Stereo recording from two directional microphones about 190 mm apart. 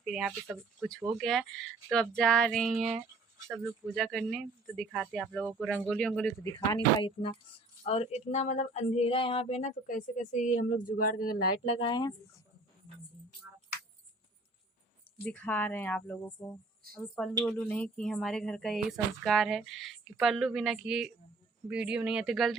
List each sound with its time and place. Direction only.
0.0 s speech: centre (ahead or behind)
3.3 s speech: 15° right (ahead or behind)
3.6 s speech: centre (ahead or behind)
6.7 s speech: 25° left (ahead or behind)
7.9 s a sound: 35° left (ahead or behind)
10.9 s speech: 45° left (ahead or behind)
11.8 s speech: 25° left (ahead or behind)
15.2 s speech: 5° left (ahead or behind)